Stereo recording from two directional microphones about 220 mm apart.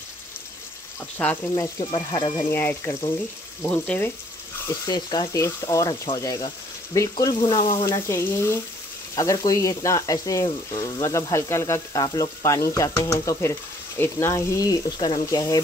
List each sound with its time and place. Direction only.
1.1 s frying: 10° left (ahead or behind)